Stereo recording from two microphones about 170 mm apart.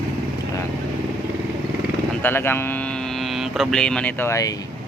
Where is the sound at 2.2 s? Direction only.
10° left (ahead or behind).